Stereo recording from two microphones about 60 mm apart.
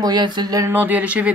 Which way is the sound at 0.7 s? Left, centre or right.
Right.